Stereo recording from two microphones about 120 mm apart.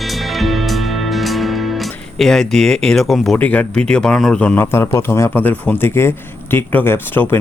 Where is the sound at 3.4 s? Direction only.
10° left (ahead or behind).